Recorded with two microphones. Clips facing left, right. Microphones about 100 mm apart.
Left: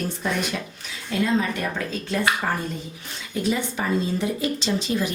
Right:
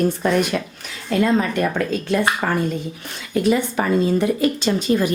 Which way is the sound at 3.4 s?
55° right (ahead or behind).